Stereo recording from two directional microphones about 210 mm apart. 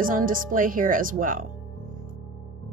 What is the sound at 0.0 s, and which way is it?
Speech, 40° right (ahead or behind).